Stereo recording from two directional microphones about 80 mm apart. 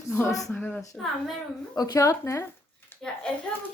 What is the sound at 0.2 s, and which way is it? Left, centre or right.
Speech, left.